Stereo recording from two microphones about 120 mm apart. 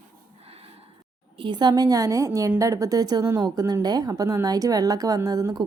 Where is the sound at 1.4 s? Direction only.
40° right (ahead or behind).